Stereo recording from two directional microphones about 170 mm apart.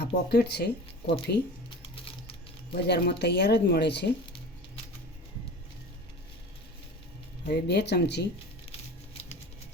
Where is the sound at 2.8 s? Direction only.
75° left (ahead or behind).